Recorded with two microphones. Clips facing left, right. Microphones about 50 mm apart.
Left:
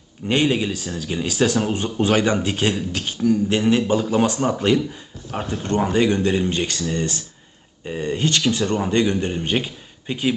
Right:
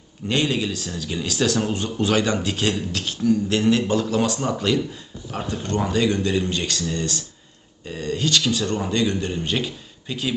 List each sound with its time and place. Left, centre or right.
0.3 s a man's voice: centre